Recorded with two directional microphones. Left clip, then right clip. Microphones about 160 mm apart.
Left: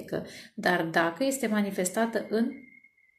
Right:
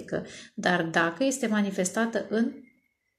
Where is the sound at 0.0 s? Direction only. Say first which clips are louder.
Right 1 dB; 25° right (ahead or behind).